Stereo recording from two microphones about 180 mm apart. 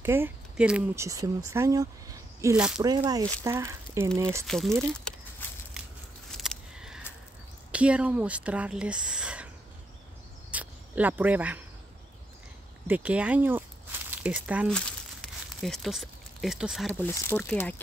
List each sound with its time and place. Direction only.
0.0 s speech: 10° right (ahead or behind)
2.5 s speech: 5° right (ahead or behind)
2.8 s speech: 20° right (ahead or behind)
4.5 s speech: centre (ahead or behind)
5.4 s a sound: 10° left (ahead or behind)
6.3 s a sound: centre (ahead or behind)
7.7 s speech: 5° right (ahead or behind)
10.5 s cricket: 10° right (ahead or behind)
12.8 s speech: 10° right (ahead or behind)
14.7 s crumpling: 5° left (ahead or behind)
17.0 s speech: 10° left (ahead or behind)